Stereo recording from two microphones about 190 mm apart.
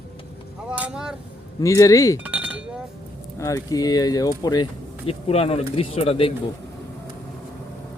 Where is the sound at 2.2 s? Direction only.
5° right (ahead or behind).